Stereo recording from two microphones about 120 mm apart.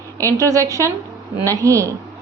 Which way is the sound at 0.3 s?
25° right (ahead or behind).